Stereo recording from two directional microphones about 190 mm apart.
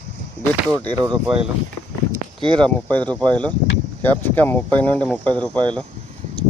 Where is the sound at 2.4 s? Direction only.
25° right (ahead or behind).